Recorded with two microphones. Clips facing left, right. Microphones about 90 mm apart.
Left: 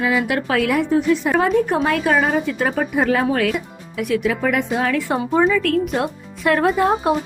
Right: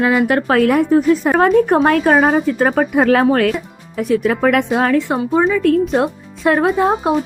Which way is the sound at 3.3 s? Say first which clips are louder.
Right 4 dB; 40° right (ahead or behind).